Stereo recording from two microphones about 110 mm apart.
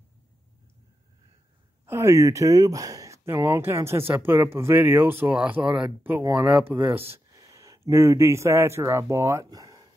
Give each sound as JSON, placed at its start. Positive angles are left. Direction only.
{"t": 1.9, "sound": "speech", "side_deg": -25}
{"t": 5.4, "sound": "speech", "side_deg": -10}
{"t": 6.0, "sound": "speech", "side_deg": -20}